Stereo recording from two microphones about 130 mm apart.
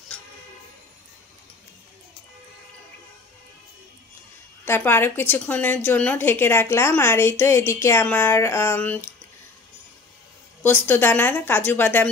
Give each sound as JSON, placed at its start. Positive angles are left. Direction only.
{"t": 4.6, "sound": "a woman's voice", "side_deg": 15}
{"t": 10.6, "sound": "a woman's voice", "side_deg": 15}